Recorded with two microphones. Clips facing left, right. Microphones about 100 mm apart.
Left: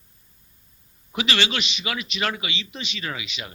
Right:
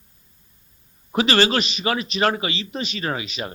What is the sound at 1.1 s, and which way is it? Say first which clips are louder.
A man's voice: right 7 dB; 40° right (ahead or behind).